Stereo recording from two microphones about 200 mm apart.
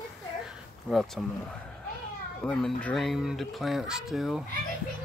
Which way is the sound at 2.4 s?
5° left (ahead or behind).